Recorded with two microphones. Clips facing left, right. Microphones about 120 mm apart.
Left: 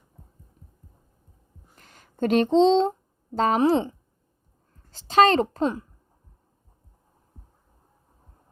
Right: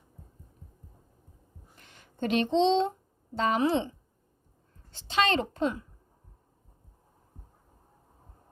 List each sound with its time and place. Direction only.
1.7 s a sound: 40° left (ahead or behind)
3.3 s a woman's voice: 40° left (ahead or behind)
4.9 s a woman's voice: 40° left (ahead or behind)